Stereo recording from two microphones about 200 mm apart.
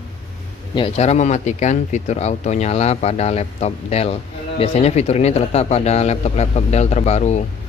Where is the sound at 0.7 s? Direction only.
30° left (ahead or behind).